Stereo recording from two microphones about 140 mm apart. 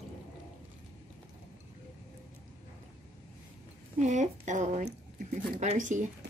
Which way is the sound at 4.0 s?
60° right (ahead or behind).